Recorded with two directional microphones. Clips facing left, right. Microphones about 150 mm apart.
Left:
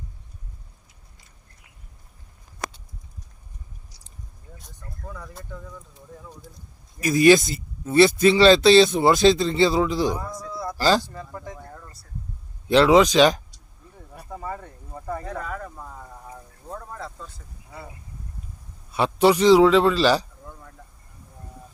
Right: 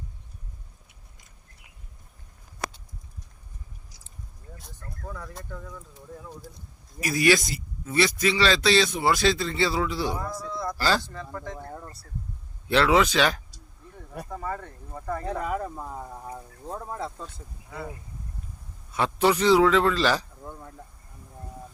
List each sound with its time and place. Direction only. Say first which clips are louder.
5.0 s speech: even; centre (ahead or behind)
7.0 s speech: left 7 dB; 20° left (ahead or behind)
10.3 s speech: even; 5° left (ahead or behind)
11.7 s a sound: right 4 dB; 25° right (ahead or behind)
12.6 s a man's voice: left 5 dB; 15° left (ahead or behind)
15.2 s speech: right 3 dB; 25° right (ahead or behind)
18.9 s a man's voice: left 4 dB; 15° left (ahead or behind)